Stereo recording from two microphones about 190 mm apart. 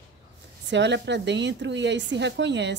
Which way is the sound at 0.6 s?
70° right (ahead or behind).